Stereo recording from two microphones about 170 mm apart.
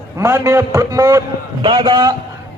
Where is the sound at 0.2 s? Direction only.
15° right (ahead or behind).